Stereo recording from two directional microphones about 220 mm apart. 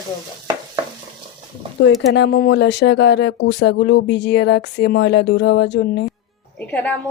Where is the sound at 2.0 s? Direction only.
50° left (ahead or behind).